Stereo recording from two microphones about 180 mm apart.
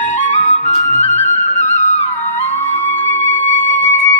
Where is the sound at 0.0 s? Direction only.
40° left (ahead or behind).